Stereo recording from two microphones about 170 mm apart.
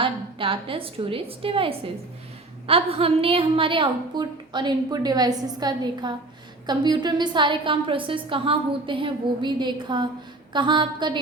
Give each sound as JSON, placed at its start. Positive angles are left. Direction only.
{"t": 0.0, "sound": "a woman's voice", "side_deg": -30}